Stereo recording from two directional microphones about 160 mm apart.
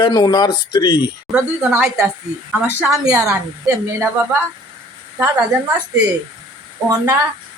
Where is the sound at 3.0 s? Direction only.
20° right (ahead or behind).